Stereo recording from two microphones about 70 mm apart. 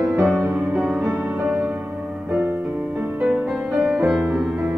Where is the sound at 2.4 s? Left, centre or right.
Right.